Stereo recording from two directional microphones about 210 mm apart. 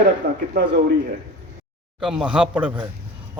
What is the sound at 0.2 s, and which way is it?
Speech, 45° right (ahead or behind).